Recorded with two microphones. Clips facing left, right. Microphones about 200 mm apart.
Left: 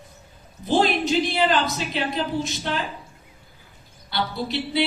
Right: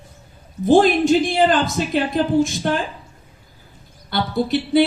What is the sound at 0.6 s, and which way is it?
Speech, 50° right (ahead or behind).